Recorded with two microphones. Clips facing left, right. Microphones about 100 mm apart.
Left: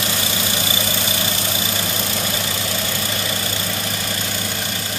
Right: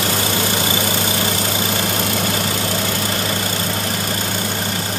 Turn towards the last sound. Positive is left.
turn(degrees=-45)  # may be behind; listen again after turning